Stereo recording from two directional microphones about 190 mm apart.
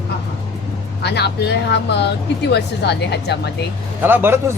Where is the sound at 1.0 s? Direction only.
60° left (ahead or behind).